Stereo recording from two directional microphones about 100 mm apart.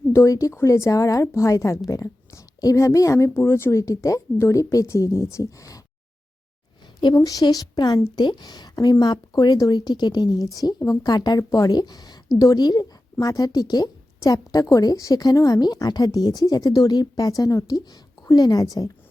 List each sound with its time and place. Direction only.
0.1 s speech: 30° left (ahead or behind)
7.0 s speech: 40° left (ahead or behind)